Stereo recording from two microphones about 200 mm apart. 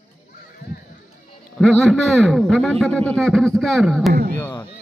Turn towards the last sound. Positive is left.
turn(degrees=10)  # may be behind; listen again after turning